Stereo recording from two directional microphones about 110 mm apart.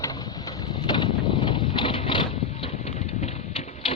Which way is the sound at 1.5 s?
45° left (ahead or behind).